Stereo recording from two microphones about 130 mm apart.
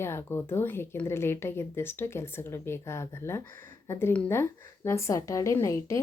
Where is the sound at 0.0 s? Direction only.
20° left (ahead or behind).